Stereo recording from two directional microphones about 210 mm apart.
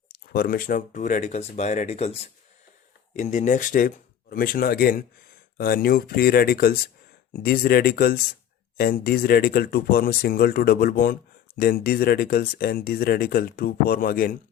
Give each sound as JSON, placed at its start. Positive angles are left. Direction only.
{"t": 0.1, "sound": "speech", "side_deg": 45}
{"t": 3.2, "sound": "speech", "side_deg": 35}